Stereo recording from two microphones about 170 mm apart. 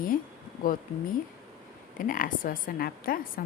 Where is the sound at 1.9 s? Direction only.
55° left (ahead or behind).